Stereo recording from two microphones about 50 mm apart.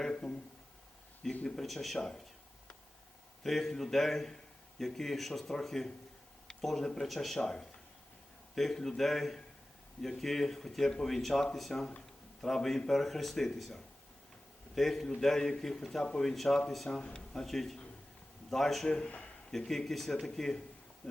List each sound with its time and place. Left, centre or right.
0.0 s speech: centre
1.5 s speech: centre
2.0 s speech: centre
3.4 s speech: centre
7.4 s speech: centre
14.8 s a man's voice: centre
17.4 s speech: centre
19.0 s a man's voice: left
19.5 s speech: centre
21.0 s insect: centre